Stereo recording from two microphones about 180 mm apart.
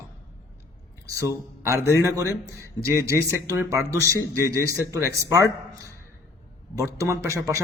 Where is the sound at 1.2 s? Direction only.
15° right (ahead or behind).